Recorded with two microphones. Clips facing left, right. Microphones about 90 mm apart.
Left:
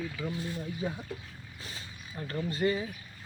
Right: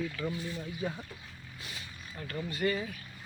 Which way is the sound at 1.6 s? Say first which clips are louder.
Left 1 dB; 35° left (ahead or behind).